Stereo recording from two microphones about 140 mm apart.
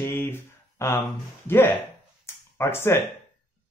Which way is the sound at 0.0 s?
15° left (ahead or behind).